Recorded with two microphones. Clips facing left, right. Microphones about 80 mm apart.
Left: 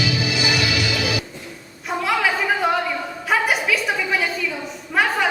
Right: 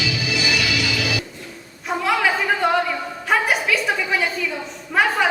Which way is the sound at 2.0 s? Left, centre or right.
Centre.